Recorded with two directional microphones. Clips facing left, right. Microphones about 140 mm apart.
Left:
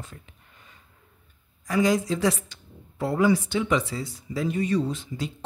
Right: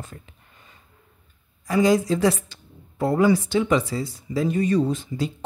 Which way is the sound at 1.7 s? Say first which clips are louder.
Right 4 dB; 30° right (ahead or behind).